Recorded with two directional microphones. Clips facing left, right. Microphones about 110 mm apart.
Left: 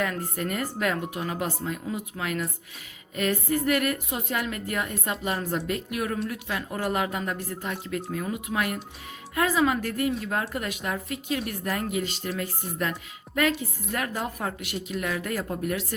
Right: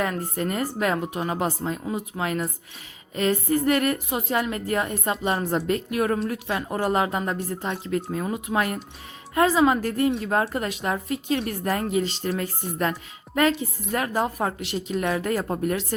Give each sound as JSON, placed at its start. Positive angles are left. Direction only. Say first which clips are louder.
{"t": 0.0, "sound": "a woman's voice", "louder": "right 3 dB", "side_deg": -30}